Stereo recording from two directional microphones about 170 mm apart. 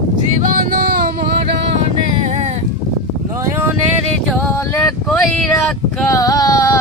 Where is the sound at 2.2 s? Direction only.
45° right (ahead or behind).